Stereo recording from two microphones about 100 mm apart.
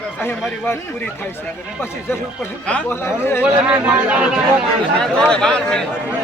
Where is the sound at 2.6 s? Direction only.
10° left (ahead or behind).